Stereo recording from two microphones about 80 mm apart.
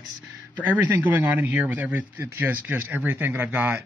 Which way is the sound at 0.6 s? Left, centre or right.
Right.